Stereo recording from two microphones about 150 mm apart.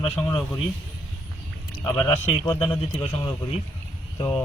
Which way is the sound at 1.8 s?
25° left (ahead or behind).